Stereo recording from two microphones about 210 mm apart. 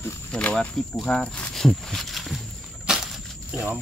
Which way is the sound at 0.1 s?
5° left (ahead or behind).